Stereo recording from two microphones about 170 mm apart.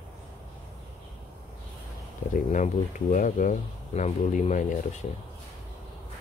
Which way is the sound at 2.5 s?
50° left (ahead or behind).